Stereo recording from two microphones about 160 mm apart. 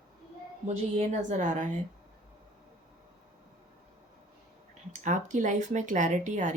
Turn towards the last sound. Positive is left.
turn(degrees=-50)  # may be behind; listen again after turning